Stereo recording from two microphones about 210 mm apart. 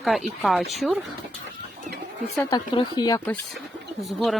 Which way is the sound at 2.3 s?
20° left (ahead or behind).